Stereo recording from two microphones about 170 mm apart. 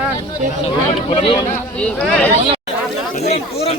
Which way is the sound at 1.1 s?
35° left (ahead or behind).